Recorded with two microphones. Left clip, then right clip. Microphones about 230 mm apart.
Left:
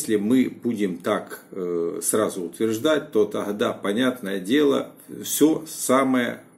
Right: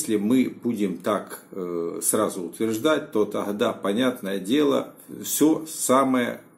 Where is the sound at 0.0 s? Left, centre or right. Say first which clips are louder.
Left 1 dB; centre.